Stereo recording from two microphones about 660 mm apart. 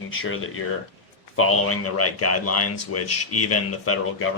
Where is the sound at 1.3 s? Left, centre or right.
Centre.